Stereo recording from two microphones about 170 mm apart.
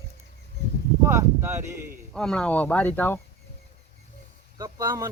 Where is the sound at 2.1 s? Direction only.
5° left (ahead or behind).